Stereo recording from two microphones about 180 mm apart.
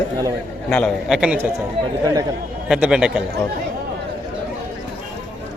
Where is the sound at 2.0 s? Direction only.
20° right (ahead or behind).